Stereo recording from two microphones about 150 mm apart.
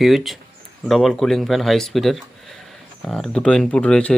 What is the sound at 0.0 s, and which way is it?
Speech, centre (ahead or behind).